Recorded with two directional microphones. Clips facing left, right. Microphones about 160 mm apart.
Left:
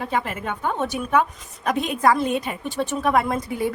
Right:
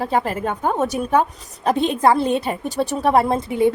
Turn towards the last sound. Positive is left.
turn(degrees=-25)  # may be behind; listen again after turning